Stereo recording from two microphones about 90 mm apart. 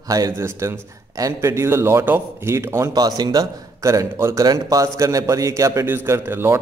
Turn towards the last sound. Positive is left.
turn(degrees=-25)  # may be behind; listen again after turning